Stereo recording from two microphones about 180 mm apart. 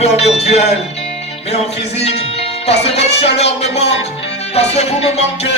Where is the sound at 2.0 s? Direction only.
35° left (ahead or behind).